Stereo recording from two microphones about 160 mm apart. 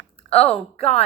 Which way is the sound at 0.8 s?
40° left (ahead or behind).